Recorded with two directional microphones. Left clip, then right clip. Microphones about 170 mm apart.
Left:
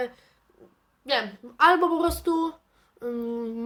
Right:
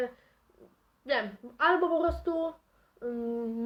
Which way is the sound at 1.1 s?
25° left (ahead or behind).